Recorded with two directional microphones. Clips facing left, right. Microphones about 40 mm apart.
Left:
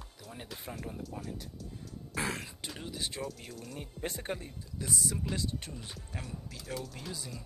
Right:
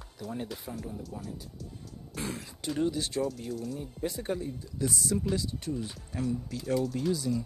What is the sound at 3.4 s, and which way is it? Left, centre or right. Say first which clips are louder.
Speech: right 9 dB; centre.